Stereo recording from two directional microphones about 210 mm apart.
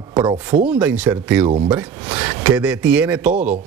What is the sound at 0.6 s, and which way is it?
Speech, 5° right (ahead or behind).